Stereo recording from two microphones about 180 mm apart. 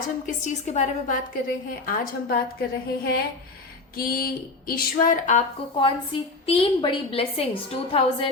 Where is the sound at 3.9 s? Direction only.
55° left (ahead or behind).